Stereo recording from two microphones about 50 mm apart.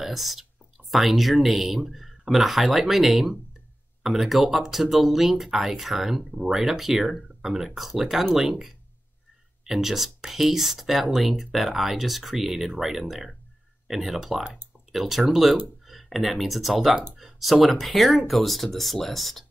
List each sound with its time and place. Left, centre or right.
0.0 s speech: centre